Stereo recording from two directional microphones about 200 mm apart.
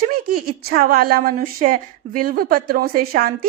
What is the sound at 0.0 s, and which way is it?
A woman's voice, 45° right (ahead or behind).